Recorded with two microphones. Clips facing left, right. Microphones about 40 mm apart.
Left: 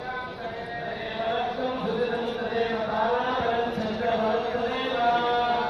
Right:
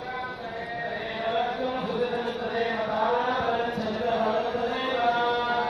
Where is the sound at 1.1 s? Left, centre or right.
Left.